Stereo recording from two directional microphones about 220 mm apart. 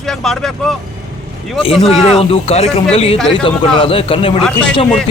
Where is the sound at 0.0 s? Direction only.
Centre (ahead or behind).